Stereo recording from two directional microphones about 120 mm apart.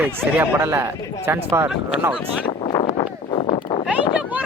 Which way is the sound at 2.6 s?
45° left (ahead or behind).